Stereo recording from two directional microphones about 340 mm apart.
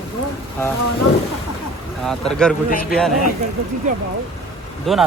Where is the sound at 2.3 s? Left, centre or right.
Centre.